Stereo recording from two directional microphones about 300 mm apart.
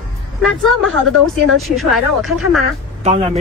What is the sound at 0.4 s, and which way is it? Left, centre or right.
A woman's voice, centre.